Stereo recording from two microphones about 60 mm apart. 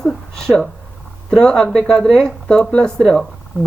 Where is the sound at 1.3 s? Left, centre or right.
Centre.